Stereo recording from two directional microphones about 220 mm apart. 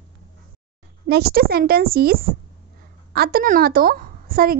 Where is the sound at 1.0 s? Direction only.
45° right (ahead or behind).